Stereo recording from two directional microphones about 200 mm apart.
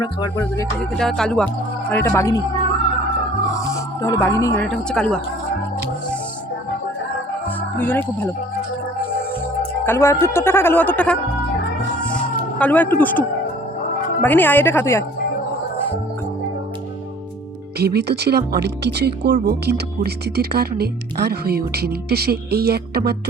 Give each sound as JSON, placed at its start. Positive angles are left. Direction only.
{"t": 0.0, "sound": "a woman's voice", "side_deg": 20}
{"t": 0.9, "sound": "a woman's voice", "side_deg": 0}
{"t": 4.0, "sound": "a woman's voice", "side_deg": 15}
{"t": 7.8, "sound": "a woman's voice", "side_deg": 10}
{"t": 9.8, "sound": "a woman's voice", "side_deg": 10}
{"t": 12.5, "sound": "a woman's voice", "side_deg": 10}
{"t": 17.7, "sound": "speech", "side_deg": -55}